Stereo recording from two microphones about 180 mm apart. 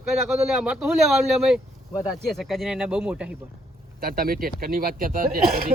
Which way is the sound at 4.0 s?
55° right (ahead or behind).